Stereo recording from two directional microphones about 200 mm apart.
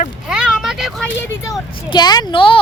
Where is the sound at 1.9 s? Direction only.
20° left (ahead or behind).